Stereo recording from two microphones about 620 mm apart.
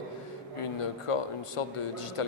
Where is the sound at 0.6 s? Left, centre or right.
Left.